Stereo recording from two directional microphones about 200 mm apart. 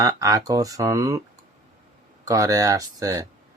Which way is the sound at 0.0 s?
15° right (ahead or behind).